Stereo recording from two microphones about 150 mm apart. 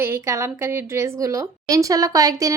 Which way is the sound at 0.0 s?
20° right (ahead or behind).